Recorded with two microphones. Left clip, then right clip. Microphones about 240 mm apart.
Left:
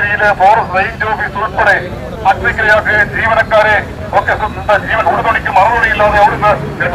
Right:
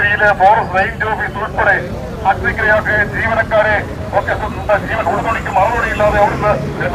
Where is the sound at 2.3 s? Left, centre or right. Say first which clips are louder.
Left 3 dB; left.